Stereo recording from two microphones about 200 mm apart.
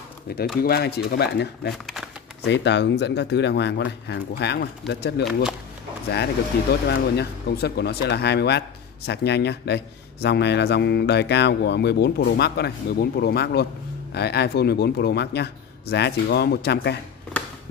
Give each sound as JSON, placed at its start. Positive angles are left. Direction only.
{"t": 0.6, "sound": "speech", "side_deg": 55}
{"t": 5.2, "sound": "speech", "side_deg": -5}
{"t": 6.7, "sound": "speech", "side_deg": 55}